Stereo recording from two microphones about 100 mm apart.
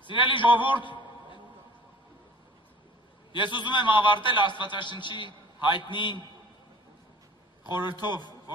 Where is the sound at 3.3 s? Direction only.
50° left (ahead or behind).